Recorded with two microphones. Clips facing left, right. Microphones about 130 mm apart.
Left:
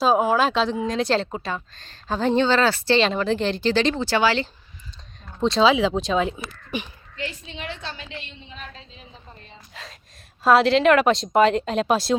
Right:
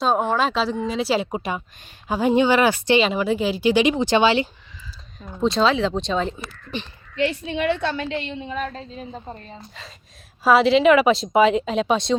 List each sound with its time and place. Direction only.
0.0 s speech: 5° left (ahead or behind); by 3.0 s 15° right (ahead or behind)
3.0 s speech: 5° right (ahead or behind)
5.4 s speech: centre (ahead or behind)
7.2 s a woman's voice: 65° right (ahead or behind); by 9.4 s 50° right (ahead or behind)
10.4 s speech: centre (ahead or behind)